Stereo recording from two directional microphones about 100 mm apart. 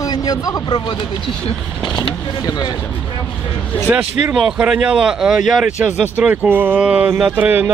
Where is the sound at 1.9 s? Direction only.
45° left (ahead or behind).